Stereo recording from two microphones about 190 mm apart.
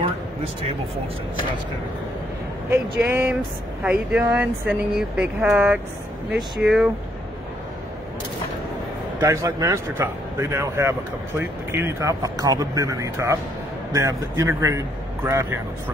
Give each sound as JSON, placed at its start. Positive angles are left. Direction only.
{"t": 2.7, "sound": "speech", "side_deg": -10}
{"t": 9.2, "sound": "speech", "side_deg": -15}